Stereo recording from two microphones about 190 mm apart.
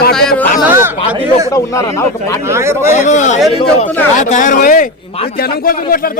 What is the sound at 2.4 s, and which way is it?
Speech, 15° right (ahead or behind).